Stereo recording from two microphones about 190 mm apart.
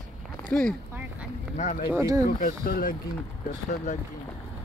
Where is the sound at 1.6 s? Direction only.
45° left (ahead or behind).